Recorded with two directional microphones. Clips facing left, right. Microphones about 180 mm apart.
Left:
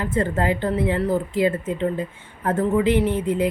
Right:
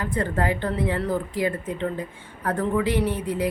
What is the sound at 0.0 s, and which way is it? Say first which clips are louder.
Speech: left 3 dB; 25° left (ahead or behind).